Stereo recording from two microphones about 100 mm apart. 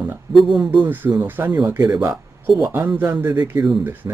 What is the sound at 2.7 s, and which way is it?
Speech, 15° right (ahead or behind).